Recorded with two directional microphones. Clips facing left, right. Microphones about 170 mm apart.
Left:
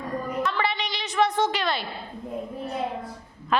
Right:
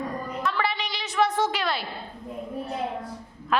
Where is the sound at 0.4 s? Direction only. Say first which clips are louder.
Left 1 dB; 5° right (ahead or behind).